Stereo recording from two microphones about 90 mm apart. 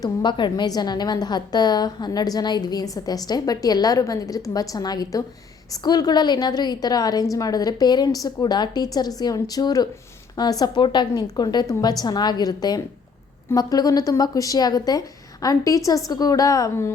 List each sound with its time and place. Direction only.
0.0 s a woman's voice: 55° left (ahead or behind); by 16.7 s 40° left (ahead or behind)